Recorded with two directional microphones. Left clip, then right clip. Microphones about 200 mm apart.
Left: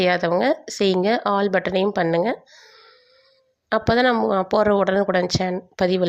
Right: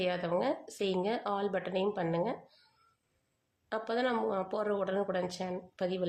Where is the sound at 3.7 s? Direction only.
40° left (ahead or behind).